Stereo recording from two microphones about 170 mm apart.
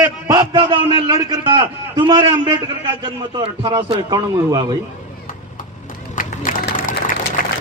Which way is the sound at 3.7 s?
25° right (ahead or behind).